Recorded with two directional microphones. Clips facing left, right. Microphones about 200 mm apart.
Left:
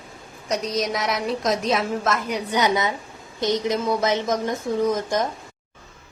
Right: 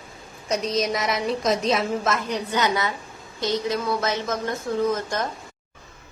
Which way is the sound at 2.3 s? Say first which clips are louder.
Left 2 dB; 15° left (ahead or behind).